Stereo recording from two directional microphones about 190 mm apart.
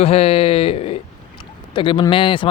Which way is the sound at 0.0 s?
30° left (ahead or behind).